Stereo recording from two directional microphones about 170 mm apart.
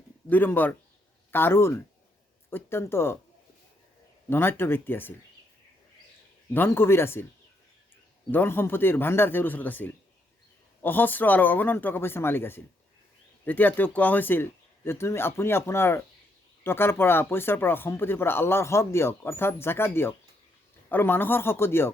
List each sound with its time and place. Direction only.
0.3 s speech: 10° left (ahead or behind)
4.3 s speech: 15° left (ahead or behind)
6.5 s speech: 10° left (ahead or behind)
8.3 s speech: 10° left (ahead or behind)